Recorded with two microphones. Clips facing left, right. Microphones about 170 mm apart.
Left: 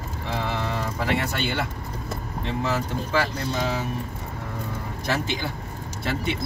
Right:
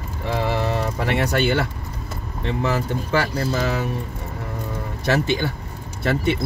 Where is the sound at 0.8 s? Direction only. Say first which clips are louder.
Right 3 dB; 65° right (ahead or behind).